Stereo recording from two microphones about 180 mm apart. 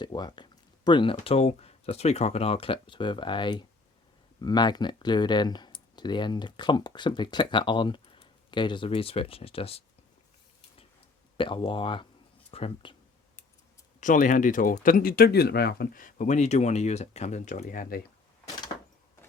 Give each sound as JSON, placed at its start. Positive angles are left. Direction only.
{"t": 0.0, "sound": "speech", "side_deg": 25}
{"t": 11.3, "sound": "speech", "side_deg": 30}
{"t": 14.0, "sound": "speech", "side_deg": 45}